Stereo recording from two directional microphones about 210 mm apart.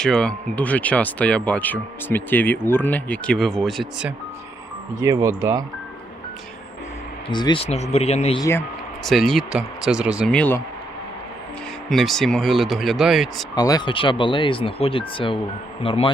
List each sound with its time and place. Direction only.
0.0 s speech: 5° left (ahead or behind)
4.9 s speech: 15° right (ahead or behind)
7.3 s speech: 20° left (ahead or behind)
8.4 s speech: 15° left (ahead or behind)
9.0 s speech: centre (ahead or behind)
10.3 s speech: 5° left (ahead or behind)
11.9 s speech: centre (ahead or behind)
13.6 s speech: 20° left (ahead or behind)